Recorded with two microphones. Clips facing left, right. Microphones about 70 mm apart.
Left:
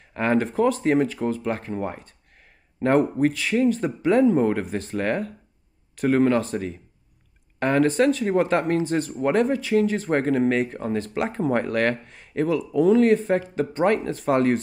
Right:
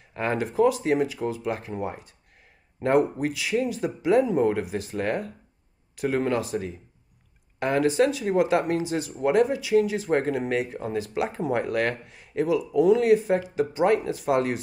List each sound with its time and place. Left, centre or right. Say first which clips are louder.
0.1 s speech: left 5 dB; left
7.5 s speech: left 2 dB; left